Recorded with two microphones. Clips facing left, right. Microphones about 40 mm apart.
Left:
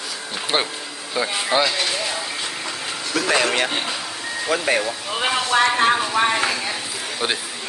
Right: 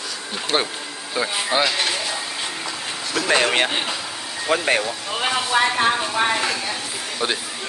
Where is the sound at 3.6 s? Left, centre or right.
Centre.